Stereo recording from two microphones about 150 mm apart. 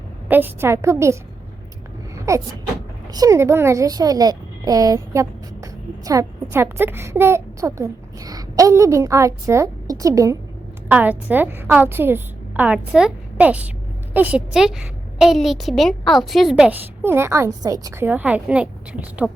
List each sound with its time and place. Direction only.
0.3 s a woman's voice: 10° right (ahead or behind)
2.1 s vehicle: 20° right (ahead or behind)
3.1 s a woman's voice: 25° right (ahead or behind)
10.8 s a woman's voice: 10° right (ahead or behind)